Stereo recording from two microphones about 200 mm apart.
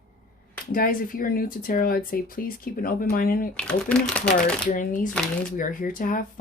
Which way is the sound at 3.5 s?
5° left (ahead or behind).